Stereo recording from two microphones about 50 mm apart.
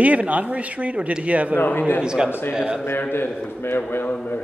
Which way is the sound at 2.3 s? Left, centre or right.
Left.